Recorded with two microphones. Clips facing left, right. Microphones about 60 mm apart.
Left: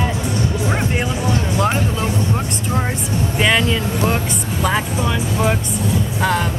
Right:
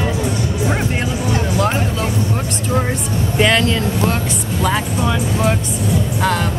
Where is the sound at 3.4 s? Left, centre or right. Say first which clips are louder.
Right 2 dB; centre.